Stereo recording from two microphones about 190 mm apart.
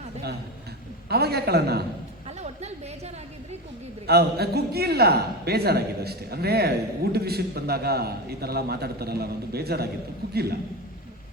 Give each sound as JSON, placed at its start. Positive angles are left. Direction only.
{"t": 1.1, "sound": "a man's voice", "side_deg": -55}
{"t": 2.4, "sound": "a sound", "side_deg": -35}
{"t": 4.0, "sound": "a man's voice", "side_deg": -55}